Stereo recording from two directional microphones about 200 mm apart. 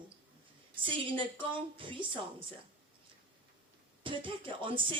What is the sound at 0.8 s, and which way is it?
Speech, 25° right (ahead or behind).